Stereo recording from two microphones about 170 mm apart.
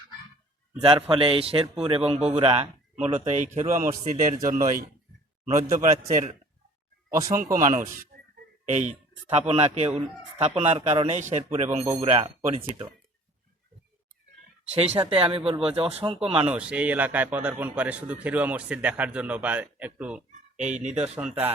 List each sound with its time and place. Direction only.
0.8 s a man's voice: 30° right (ahead or behind); by 7.5 s 45° right (ahead or behind)
8.6 s speech: 45° right (ahead or behind)
14.7 s speech: 35° right (ahead or behind)
16.5 s a man's voice: 5° right (ahead or behind)
20.7 s speech: 45° right (ahead or behind)
21.2 s a man's voice: 5° right (ahead or behind)